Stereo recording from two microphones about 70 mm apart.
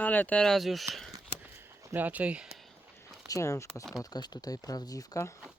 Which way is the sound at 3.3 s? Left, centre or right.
Left.